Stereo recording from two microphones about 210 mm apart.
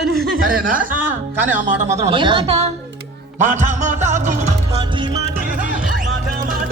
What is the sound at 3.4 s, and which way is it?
Music, 35° right (ahead or behind).